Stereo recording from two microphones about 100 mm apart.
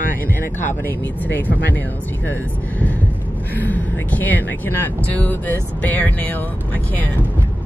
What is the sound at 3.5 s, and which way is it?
Speech, 15° left (ahead or behind).